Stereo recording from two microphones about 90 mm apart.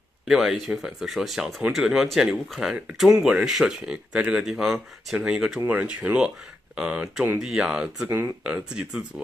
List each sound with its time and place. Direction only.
0.3 s speech: 5° right (ahead or behind)